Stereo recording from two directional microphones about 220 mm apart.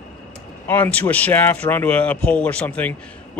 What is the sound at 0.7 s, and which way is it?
Speech, 10° left (ahead or behind).